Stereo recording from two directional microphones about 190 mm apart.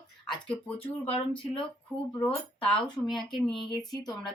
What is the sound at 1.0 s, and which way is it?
Speech, 30° left (ahead or behind).